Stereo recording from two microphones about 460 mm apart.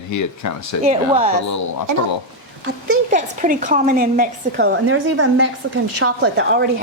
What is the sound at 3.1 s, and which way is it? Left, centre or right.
A woman's voice, centre.